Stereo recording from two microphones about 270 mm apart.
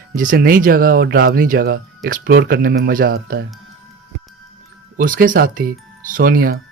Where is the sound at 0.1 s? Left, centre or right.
Right.